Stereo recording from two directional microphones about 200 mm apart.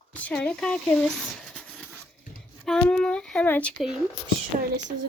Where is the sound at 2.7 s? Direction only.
5° left (ahead or behind).